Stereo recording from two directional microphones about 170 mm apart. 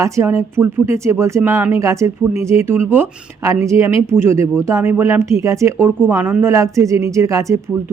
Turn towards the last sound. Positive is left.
turn(degrees=-20)  # may be behind; listen again after turning